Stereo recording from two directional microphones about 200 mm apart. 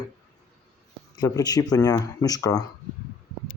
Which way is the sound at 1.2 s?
20° left (ahead or behind).